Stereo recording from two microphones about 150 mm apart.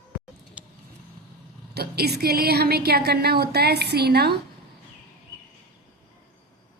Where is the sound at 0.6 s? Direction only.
10° right (ahead or behind).